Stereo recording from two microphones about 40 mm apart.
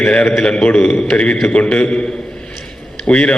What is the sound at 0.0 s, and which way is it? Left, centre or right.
A man's voice, left.